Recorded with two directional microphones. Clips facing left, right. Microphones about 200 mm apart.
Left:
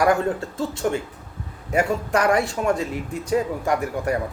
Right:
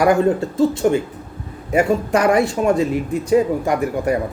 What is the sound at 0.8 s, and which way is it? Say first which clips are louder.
Speech: right 7 dB; 20° right (ahead or behind).